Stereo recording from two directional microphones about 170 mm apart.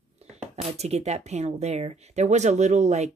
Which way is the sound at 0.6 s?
40° right (ahead or behind).